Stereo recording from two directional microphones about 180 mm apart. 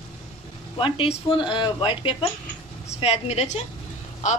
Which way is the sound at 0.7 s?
30° left (ahead or behind).